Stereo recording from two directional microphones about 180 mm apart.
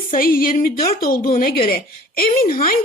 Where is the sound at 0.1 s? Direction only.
50° left (ahead or behind).